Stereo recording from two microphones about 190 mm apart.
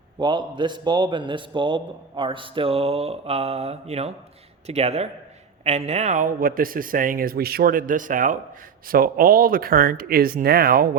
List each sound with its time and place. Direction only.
0.2 s a man's voice: 25° right (ahead or behind); by 10.8 s 50° right (ahead or behind)